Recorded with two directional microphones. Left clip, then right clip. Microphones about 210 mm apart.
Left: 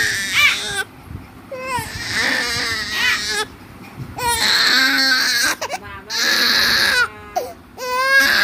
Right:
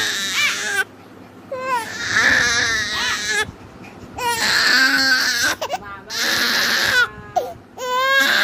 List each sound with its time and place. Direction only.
0.0 s baby cry: 10° left (ahead or behind)